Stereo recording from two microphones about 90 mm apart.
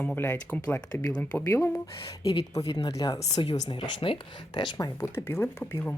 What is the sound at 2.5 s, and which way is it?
Speech, 45° left (ahead or behind).